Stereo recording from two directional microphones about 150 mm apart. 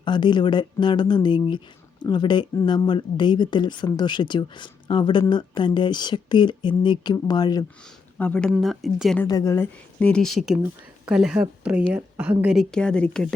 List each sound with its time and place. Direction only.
0.0 s speech: 30° left (ahead or behind)
8.2 s speech: 10° left (ahead or behind)
9.2 s a woman's voice: 25° left (ahead or behind)
10.0 s speech: 5° left (ahead or behind); by 12.5 s 10° right (ahead or behind)
12.5 s speech: 5° left (ahead or behind)